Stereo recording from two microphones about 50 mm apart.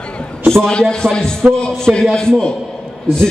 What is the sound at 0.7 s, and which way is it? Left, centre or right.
A man's voice, centre.